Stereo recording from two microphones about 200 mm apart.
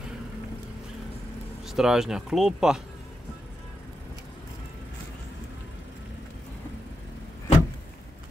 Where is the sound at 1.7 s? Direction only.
Centre (ahead or behind).